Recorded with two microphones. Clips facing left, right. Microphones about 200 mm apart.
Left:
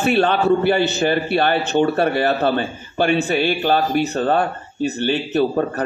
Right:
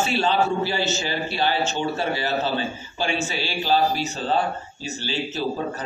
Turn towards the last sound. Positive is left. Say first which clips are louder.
# left 8 dB
turn(degrees=60)  # may be behind; listen again after turning